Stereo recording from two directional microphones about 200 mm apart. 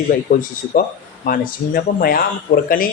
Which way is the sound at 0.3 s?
45° left (ahead or behind).